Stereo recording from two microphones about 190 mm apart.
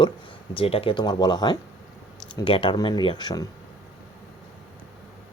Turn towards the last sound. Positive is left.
turn(degrees=20)  # may be behind; listen again after turning